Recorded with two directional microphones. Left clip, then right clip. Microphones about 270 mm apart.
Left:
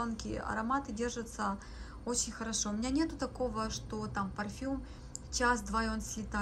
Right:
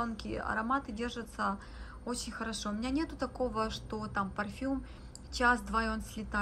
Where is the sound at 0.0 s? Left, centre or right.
Centre.